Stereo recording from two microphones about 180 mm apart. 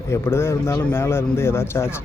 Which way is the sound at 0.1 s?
15° left (ahead or behind).